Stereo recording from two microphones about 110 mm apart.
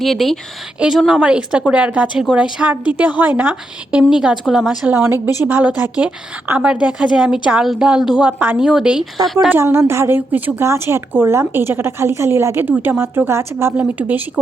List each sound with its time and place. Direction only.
0.0 s a woman's voice: centre (ahead or behind)
4.9 s a woman's voice: 20° right (ahead or behind); by 9.5 s centre (ahead or behind)
9.5 s a woman's voice: 20° right (ahead or behind)